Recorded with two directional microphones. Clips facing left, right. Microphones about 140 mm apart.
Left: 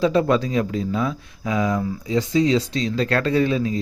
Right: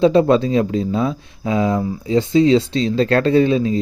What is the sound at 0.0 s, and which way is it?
Speech, 25° right (ahead or behind).